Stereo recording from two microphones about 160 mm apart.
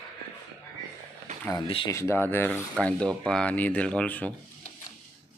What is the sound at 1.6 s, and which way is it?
Speech, 35° left (ahead or behind).